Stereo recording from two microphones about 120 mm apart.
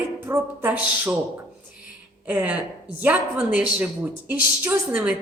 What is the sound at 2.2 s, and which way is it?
A woman's voice, 10° right (ahead or behind).